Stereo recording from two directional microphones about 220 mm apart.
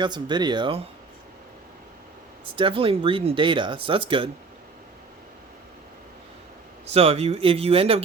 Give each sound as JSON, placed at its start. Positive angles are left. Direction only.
{"t": 0.0, "sound": "speech", "side_deg": -20}
{"t": 2.6, "sound": "speech", "side_deg": -25}
{"t": 6.8, "sound": "speech", "side_deg": -30}